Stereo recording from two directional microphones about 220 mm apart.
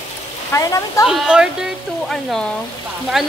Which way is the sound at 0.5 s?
15° left (ahead or behind).